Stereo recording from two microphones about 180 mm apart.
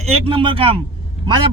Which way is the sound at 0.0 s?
30° right (ahead or behind).